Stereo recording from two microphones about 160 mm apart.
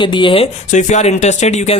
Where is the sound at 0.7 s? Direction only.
45° left (ahead or behind).